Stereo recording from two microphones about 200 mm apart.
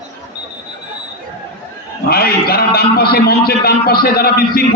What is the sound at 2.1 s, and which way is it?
A man's voice, 50° left (ahead or behind).